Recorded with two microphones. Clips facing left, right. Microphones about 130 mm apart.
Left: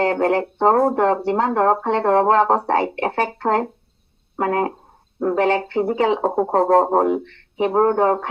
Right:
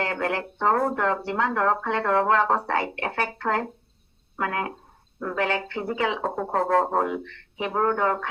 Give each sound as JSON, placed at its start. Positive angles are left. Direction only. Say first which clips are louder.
{"t": 0.0, "sound": "speech", "louder": "left 9 dB", "side_deg": 35}